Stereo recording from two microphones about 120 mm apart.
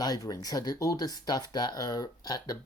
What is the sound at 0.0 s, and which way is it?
Speech, 30° left (ahead or behind).